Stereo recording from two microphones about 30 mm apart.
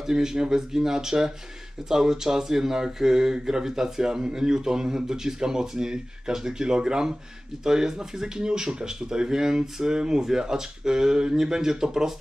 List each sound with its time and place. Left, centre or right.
0.0 s speech: centre